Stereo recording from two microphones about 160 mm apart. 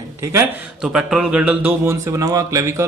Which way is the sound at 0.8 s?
5° right (ahead or behind).